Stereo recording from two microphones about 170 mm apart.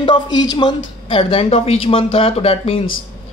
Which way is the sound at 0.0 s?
25° left (ahead or behind).